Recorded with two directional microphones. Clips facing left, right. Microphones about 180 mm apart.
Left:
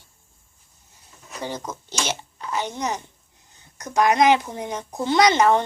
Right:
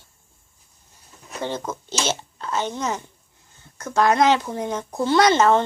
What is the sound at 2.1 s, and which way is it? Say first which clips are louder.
Speech: right 2 dB; 15° left (ahead or behind).